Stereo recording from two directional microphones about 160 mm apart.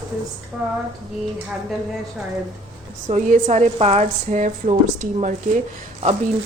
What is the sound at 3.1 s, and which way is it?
Speech, 50° right (ahead or behind).